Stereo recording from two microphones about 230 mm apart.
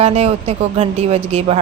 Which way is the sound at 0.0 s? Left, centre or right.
Right.